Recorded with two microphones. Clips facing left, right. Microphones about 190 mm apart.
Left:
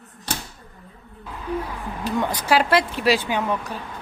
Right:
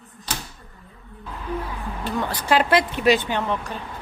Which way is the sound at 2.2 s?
5° left (ahead or behind).